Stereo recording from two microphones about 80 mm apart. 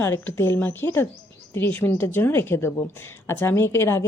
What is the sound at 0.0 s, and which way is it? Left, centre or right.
A woman's voice, left.